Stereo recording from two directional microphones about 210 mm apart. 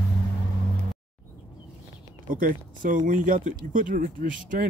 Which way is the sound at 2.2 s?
40° right (ahead or behind).